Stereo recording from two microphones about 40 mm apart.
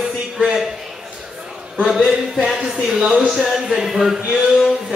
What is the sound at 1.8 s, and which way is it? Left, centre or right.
Speech, centre.